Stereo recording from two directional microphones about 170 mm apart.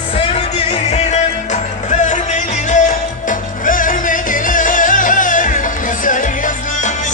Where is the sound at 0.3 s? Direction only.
35° left (ahead or behind).